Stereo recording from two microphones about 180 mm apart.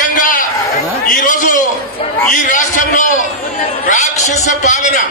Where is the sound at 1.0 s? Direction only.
50° left (ahead or behind).